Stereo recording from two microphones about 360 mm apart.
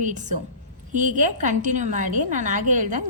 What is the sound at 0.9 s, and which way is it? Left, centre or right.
A woman's voice, right.